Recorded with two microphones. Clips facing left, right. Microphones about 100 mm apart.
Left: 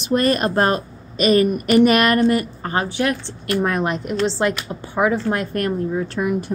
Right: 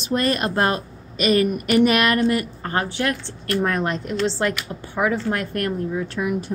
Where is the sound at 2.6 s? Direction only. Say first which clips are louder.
Left 2 dB; 20° left (ahead or behind).